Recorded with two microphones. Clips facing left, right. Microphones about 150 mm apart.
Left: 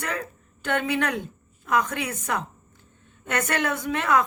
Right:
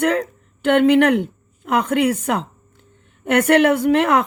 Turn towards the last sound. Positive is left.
turn(degrees=-65)  # may be behind; listen again after turning